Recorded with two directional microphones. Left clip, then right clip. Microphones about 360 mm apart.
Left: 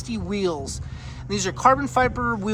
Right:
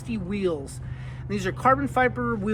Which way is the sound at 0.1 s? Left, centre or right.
Centre.